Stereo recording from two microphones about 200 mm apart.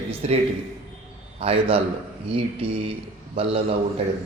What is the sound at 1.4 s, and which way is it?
Speech, 30° right (ahead or behind).